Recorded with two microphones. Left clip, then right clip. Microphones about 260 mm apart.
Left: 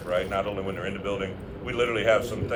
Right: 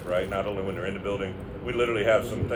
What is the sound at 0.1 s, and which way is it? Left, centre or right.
A man's voice, left.